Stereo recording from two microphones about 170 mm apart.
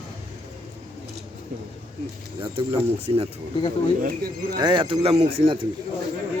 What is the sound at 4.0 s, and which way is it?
Speech, 60° right (ahead or behind).